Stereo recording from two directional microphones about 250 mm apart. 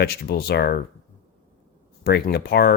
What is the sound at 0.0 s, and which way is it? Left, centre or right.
Speech, left.